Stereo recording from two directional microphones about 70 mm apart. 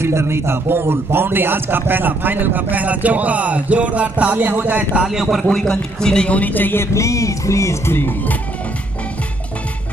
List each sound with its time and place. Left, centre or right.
0.0 s a man's voice: right
5.0 s a man's voice: centre
5.5 s a man's voice: centre; by 6.9 s left
6.9 s music: left
7.9 s speech: left